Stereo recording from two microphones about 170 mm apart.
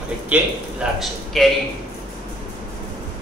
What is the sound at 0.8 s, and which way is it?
Speech, 5° right (ahead or behind).